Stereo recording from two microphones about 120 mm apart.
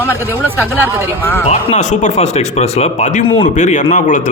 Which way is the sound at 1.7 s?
80° left.